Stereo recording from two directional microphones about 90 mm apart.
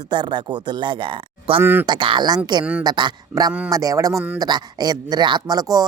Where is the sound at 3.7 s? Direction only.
40° right (ahead or behind).